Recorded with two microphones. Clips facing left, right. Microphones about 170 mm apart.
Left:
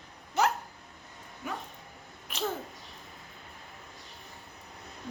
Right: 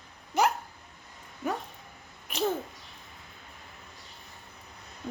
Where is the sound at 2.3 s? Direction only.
15° right (ahead or behind).